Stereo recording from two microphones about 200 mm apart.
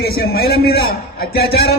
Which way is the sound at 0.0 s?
50° left (ahead or behind).